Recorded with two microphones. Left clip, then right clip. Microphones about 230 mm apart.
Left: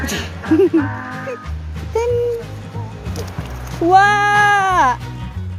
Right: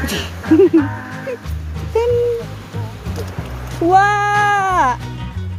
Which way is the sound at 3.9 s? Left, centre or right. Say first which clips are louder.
Left 1 dB; centre.